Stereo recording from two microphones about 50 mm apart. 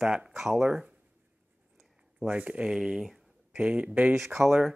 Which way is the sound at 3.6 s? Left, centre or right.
Right.